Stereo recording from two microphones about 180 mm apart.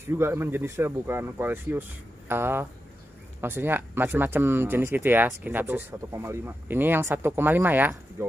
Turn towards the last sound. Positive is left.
turn(degrees=-10)  # may be behind; listen again after turning